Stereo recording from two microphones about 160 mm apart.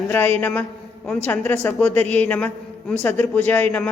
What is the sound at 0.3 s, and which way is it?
A man's voice, 10° left (ahead or behind).